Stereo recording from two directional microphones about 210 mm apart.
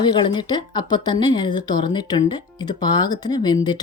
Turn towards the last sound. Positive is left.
turn(degrees=20)  # may be behind; listen again after turning